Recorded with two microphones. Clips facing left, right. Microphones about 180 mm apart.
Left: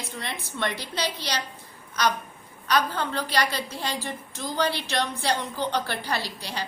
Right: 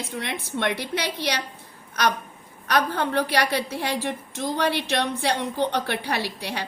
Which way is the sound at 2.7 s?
65° right (ahead or behind).